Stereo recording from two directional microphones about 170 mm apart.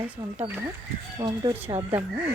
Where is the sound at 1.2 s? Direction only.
25° right (ahead or behind).